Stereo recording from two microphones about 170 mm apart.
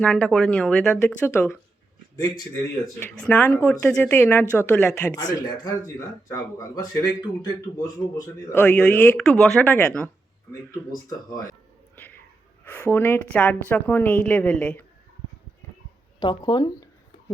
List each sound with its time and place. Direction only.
0.0 s speech: 5° left (ahead or behind)
3.2 s speech: 10° left (ahead or behind)
5.1 s speech: 20° left (ahead or behind)
10.5 s speech: 20° left (ahead or behind)
11.9 s a sound: 10° left (ahead or behind)
12.6 s speech: 10° left (ahead or behind)
16.2 s a sound: 25° left (ahead or behind)